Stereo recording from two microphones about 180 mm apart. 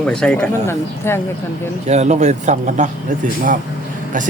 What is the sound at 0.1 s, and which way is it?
Speech, 5° left (ahead or behind).